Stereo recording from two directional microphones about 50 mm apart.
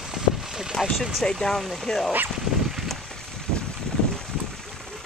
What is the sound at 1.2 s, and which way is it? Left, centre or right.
Speech, centre.